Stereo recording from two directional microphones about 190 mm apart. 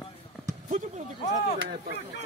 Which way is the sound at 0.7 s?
40° right (ahead or behind).